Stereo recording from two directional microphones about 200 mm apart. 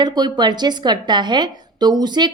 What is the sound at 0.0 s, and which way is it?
A woman's voice, 20° right (ahead or behind).